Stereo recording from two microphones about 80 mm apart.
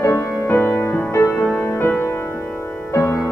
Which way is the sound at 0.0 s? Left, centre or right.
Left.